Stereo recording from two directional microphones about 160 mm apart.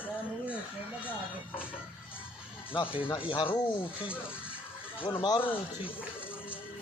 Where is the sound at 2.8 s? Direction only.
30° left (ahead or behind).